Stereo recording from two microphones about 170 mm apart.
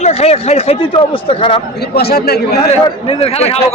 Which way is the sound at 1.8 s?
70° left (ahead or behind).